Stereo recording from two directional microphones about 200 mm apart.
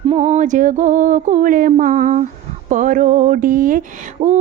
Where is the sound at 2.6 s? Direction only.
40° right (ahead or behind).